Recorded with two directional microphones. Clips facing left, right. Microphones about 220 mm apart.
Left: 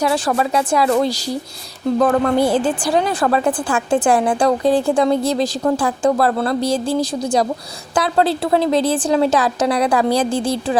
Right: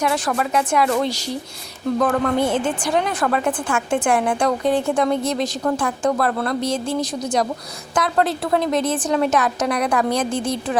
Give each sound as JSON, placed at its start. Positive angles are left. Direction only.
{"t": 0.0, "sound": "a woman's voice", "side_deg": 35}